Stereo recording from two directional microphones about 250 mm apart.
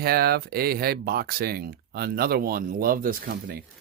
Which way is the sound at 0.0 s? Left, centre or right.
Right.